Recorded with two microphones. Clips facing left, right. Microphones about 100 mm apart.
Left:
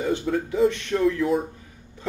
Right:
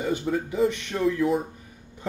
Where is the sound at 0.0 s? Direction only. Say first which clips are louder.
Left 2 dB; 15° right (ahead or behind).